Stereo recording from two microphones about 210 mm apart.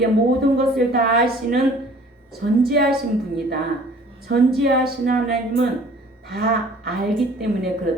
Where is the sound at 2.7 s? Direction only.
50° right (ahead or behind).